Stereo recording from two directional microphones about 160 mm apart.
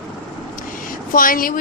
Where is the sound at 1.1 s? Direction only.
60° left (ahead or behind).